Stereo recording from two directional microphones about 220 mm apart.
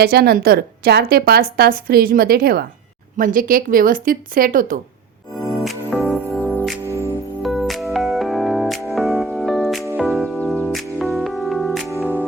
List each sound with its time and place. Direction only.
0.0 s a woman's voice: 45° right (ahead or behind)
5.4 s music: centre (ahead or behind)